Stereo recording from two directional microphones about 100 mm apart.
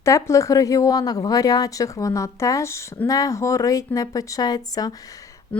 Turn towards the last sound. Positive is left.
turn(degrees=40)  # may be behind; listen again after turning